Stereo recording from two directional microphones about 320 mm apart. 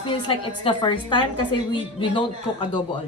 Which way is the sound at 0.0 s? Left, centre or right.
Centre.